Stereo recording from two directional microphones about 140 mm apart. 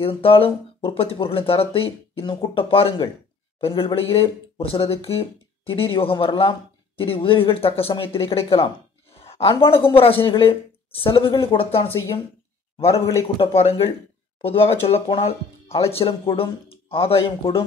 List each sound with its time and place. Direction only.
0.0 s speech: 40° left (ahead or behind)
13.4 s speech: 45° left (ahead or behind)